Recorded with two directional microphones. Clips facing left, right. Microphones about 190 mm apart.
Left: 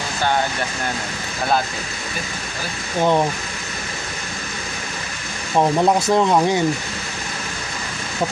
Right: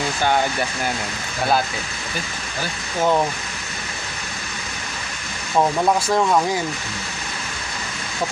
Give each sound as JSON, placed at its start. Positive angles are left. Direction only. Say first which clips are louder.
{"t": 3.0, "sound": "speech", "louder": "left 1 dB", "side_deg": 15}
{"t": 5.6, "sound": "speech", "louder": "left 2 dB", "side_deg": 20}